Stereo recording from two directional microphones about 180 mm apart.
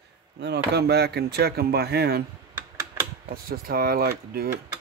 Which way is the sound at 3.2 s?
55° right (ahead or behind).